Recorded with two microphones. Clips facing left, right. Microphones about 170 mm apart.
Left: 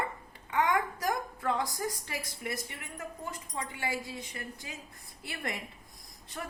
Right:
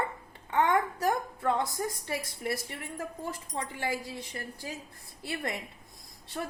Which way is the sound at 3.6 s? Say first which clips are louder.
Right 2 dB; 40° right (ahead or behind).